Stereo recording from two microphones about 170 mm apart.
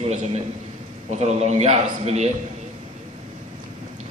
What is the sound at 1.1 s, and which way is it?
A man's voice, 40° right (ahead or behind).